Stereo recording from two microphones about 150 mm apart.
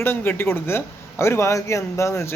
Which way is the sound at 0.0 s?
15° left (ahead or behind).